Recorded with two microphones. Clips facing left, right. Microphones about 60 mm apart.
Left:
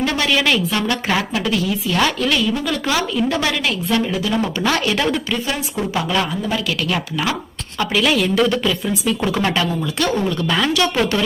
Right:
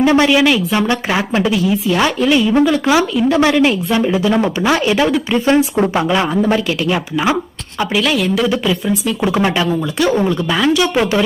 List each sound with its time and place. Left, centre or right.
0.0 s speech: right
0.3 s speech: centre
0.7 s speech: centre
3.2 s speech: centre
3.4 s speech: right
5.3 s speech: right
7.9 s speech: centre